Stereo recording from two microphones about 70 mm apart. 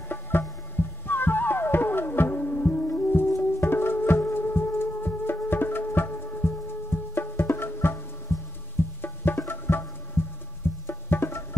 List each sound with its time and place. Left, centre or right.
0.1 s music: left